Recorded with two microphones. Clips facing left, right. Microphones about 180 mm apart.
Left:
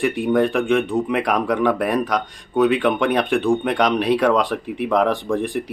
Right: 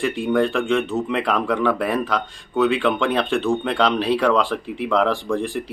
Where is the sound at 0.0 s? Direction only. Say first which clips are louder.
Left 2 dB; 20° left (ahead or behind).